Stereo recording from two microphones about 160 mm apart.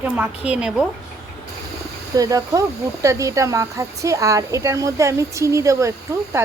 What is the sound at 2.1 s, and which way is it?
Speech, 20° right (ahead or behind).